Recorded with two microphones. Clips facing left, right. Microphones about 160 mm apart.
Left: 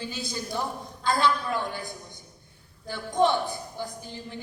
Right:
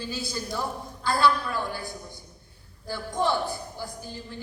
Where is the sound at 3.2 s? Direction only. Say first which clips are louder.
Left 3 dB; 20° left (ahead or behind).